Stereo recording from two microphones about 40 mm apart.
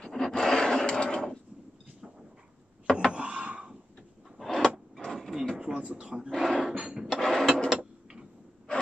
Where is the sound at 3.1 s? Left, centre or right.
Right.